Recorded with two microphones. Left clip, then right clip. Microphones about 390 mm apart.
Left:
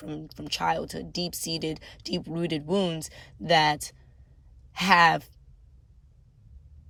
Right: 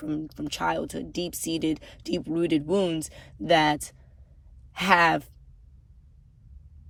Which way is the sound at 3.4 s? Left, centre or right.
Centre.